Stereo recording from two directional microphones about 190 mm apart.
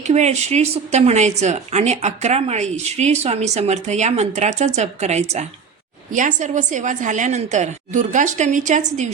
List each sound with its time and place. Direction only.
0.1 s a woman's voice: 35° right (ahead or behind)